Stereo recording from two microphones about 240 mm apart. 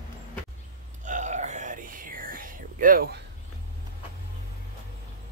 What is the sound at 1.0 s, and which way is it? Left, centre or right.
Whispering, right.